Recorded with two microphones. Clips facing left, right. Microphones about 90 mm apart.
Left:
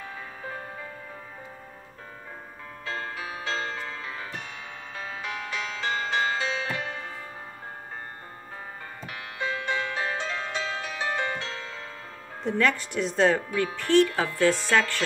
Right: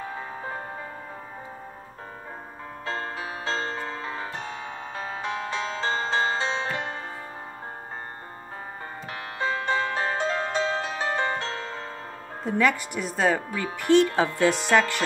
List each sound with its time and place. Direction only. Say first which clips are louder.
0.0 s music: right 4 dB; 35° right (ahead or behind)
2.8 s music: right 2 dB; 35° right (ahead or behind)
9.1 s music: right 3 dB; 35° right (ahead or behind)
12.4 s speech: right 1 dB; 10° right (ahead or behind)
14.0 s music: right 1 dB; 25° right (ahead or behind)